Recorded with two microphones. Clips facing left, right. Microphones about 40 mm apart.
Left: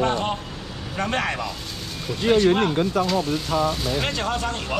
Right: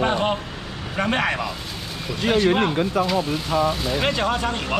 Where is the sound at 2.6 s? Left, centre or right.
Centre.